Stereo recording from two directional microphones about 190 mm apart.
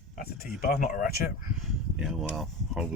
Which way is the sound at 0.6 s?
45° left (ahead or behind).